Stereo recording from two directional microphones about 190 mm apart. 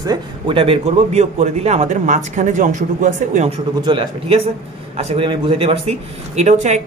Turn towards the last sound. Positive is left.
turn(degrees=-35)  # may be behind; listen again after turning